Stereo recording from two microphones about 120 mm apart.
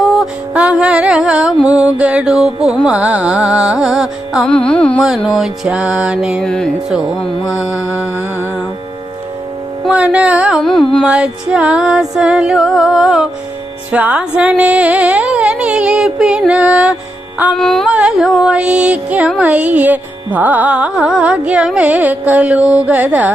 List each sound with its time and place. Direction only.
0.0 s music: centre (ahead or behind)
4.4 s carnatic music: 10° left (ahead or behind)
4.9 s carnatic music: centre (ahead or behind)
6.4 s music: 5° left (ahead or behind)
7.5 s mantra: 25° left (ahead or behind)
9.9 s carnatic music: 10° right (ahead or behind)
10.6 s music: 5° left (ahead or behind)
11.0 s music: 5° right (ahead or behind)
17.6 s music: 5° left (ahead or behind)
17.8 s carnatic music: 5° right (ahead or behind)